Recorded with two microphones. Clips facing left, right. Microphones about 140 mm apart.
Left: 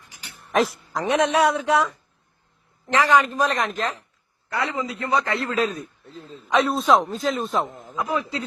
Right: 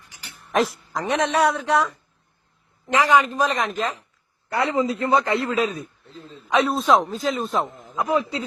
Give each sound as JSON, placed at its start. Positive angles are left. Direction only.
{"t": 0.5, "sound": "a woman's voice", "side_deg": 0}
{"t": 2.8, "sound": "a man's voice", "side_deg": -10}
{"t": 3.2, "sound": "a woman's voice", "side_deg": 0}
{"t": 4.5, "sound": "a man's voice", "side_deg": -30}
{"t": 6.1, "sound": "a man's voice", "side_deg": 40}
{"t": 6.5, "sound": "a woman's voice", "side_deg": 0}
{"t": 7.9, "sound": "a man's voice", "side_deg": -20}